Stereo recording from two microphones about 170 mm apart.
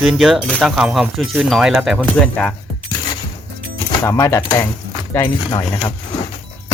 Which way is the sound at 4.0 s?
20° left (ahead or behind).